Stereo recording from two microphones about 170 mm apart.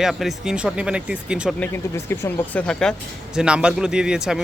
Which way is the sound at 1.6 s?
15° left (ahead or behind).